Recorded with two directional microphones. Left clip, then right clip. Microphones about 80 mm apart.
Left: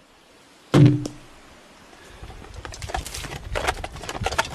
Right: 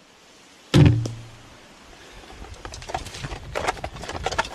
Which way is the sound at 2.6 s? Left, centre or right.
Centre.